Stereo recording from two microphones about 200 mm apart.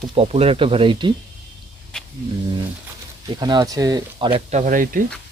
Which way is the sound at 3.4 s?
20° right (ahead or behind).